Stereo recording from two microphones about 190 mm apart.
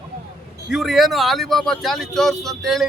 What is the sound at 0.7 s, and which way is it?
Speech, centre (ahead or behind).